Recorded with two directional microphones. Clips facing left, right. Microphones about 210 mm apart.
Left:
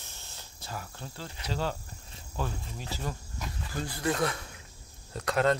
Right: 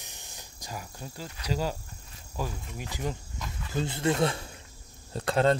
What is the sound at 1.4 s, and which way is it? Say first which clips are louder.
Speech: right 2 dB; 10° right (ahead or behind).